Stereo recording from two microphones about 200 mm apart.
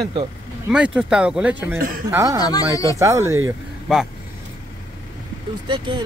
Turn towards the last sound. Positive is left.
turn(degrees=-25)  # may be behind; listen again after turning